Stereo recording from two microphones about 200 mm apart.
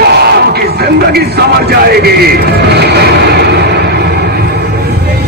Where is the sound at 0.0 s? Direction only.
55° right (ahead or behind).